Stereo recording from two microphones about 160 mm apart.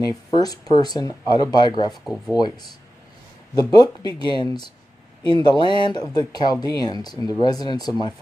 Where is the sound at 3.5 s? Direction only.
25° left (ahead or behind).